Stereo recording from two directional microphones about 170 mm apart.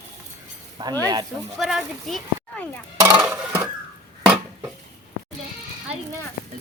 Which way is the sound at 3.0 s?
20° right (ahead or behind).